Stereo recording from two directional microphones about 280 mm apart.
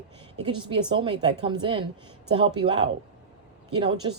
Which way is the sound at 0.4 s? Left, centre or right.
Centre.